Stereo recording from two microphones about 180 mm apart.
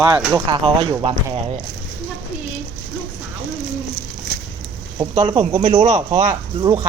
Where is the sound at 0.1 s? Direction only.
10° right (ahead or behind).